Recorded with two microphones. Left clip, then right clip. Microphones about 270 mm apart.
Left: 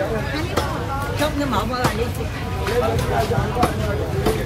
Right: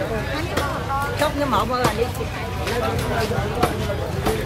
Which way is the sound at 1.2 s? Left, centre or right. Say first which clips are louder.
Right 1 dB; right.